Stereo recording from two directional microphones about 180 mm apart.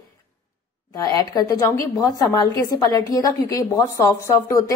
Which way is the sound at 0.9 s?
20° left (ahead or behind).